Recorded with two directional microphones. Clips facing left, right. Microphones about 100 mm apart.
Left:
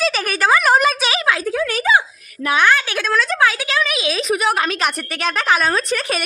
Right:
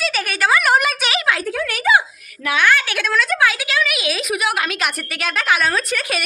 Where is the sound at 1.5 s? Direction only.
20° left (ahead or behind).